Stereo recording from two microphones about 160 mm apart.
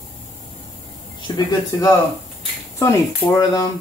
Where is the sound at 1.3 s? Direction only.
30° left (ahead or behind).